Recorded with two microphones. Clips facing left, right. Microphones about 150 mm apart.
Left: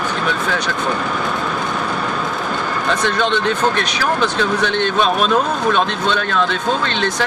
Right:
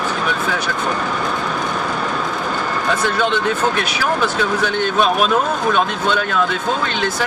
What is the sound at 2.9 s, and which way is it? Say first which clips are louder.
Speech: left 1 dB; 5° right (ahead or behind).